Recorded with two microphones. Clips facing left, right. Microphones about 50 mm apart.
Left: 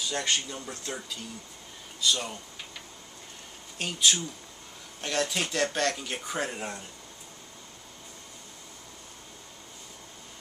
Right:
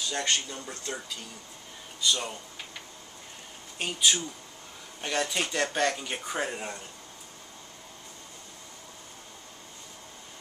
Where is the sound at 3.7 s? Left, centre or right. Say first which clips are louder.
Even; centre.